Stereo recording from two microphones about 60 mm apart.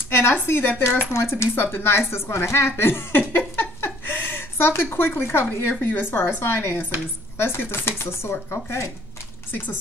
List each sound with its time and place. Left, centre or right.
0.1 s speech: left